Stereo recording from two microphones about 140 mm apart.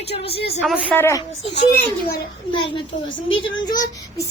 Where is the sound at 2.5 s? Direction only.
35° left (ahead or behind).